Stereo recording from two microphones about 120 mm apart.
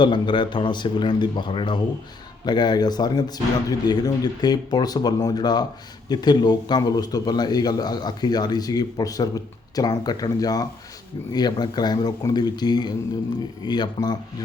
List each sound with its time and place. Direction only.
0.0 s a man's voice: 40° left (ahead or behind)